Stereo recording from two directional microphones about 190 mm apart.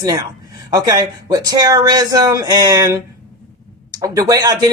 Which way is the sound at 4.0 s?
20° right (ahead or behind).